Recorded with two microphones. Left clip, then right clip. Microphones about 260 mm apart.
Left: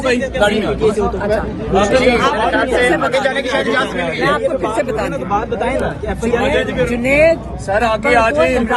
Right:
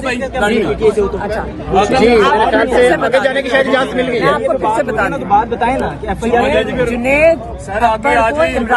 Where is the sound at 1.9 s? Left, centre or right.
Right.